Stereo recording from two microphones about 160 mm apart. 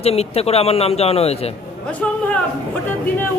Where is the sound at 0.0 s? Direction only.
40° left (ahead or behind).